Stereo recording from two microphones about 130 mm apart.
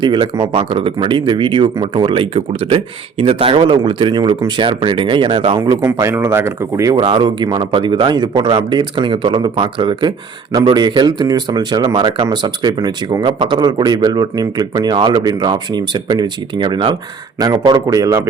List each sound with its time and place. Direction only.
0.0 s speech: 35° right (ahead or behind)
5.5 s speech: 25° right (ahead or behind)
6.9 s speech: 40° right (ahead or behind)